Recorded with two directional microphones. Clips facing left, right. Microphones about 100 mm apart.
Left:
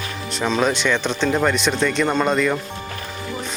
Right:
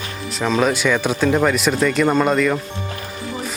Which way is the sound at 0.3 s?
Centre (ahead or behind).